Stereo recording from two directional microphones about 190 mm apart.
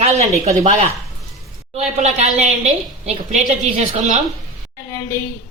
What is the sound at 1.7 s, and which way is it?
A woman's voice, 35° right (ahead or behind).